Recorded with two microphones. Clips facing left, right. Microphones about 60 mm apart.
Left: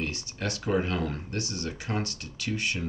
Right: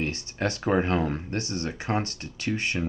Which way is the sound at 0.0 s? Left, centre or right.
Right.